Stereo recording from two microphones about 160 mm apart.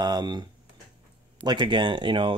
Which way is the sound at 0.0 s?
25° right (ahead or behind).